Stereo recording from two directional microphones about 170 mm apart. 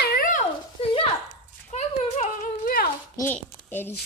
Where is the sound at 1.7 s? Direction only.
40° left (ahead or behind).